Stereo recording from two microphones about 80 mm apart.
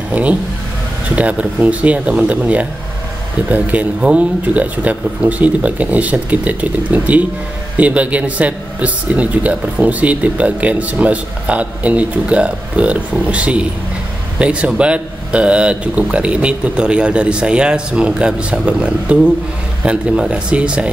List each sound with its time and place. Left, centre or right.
0.1 s a man's voice: centre